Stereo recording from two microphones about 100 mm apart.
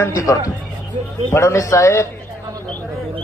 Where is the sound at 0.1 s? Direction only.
35° left (ahead or behind).